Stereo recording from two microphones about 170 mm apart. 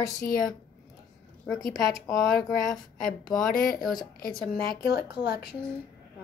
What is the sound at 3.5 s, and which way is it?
A woman's voice, 55° left (ahead or behind).